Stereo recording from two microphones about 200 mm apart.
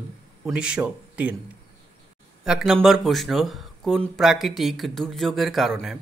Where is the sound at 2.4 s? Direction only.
5° right (ahead or behind).